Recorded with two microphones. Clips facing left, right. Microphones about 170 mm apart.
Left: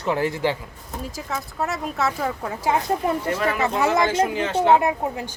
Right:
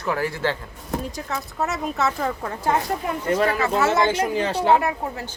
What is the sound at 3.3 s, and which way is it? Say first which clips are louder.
Speech: right 2 dB; 30° right (ahead or behind).